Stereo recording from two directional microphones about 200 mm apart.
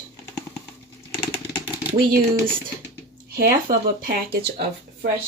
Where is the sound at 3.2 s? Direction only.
45° right (ahead or behind).